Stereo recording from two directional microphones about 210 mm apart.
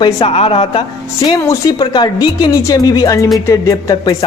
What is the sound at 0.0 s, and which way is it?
Speech, 25° left (ahead or behind).